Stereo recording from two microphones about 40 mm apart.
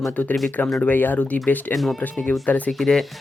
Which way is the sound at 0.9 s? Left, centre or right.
Left.